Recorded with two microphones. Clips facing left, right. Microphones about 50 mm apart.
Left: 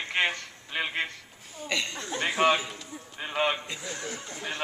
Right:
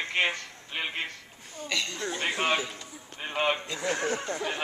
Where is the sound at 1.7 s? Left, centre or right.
Left.